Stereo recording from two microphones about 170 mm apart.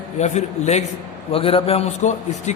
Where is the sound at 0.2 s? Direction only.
40° left (ahead or behind).